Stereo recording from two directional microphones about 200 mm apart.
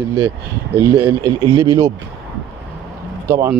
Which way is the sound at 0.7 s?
10° right (ahead or behind).